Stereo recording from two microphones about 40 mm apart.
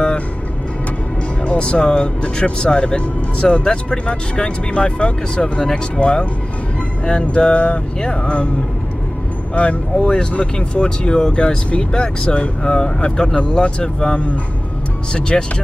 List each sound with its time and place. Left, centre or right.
1.4 s speech: left
9.6 s speech: left